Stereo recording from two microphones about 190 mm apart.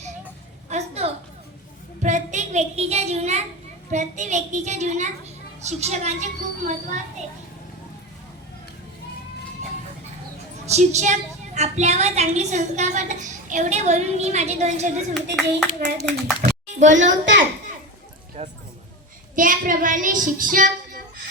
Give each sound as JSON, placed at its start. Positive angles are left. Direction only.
{"t": 0.7, "sound": "a sound", "side_deg": -35}
{"t": 2.0, "sound": "child singing", "side_deg": -40}
{"t": 3.9, "sound": "a woman's voice", "side_deg": -40}
{"t": 10.7, "sound": "a woman's voice", "side_deg": -35}
{"t": 15.1, "sound": "a child's voice", "side_deg": 5}
{"t": 16.4, "sound": "clapping", "side_deg": -40}
{"t": 17.0, "sound": "a child's voice", "side_deg": -75}
{"t": 18.4, "sound": "a woman's voice", "side_deg": -30}
{"t": 19.4, "sound": "child singing", "side_deg": -45}